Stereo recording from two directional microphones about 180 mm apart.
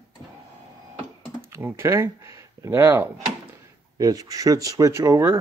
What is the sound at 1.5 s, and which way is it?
Speech, 15° right (ahead or behind).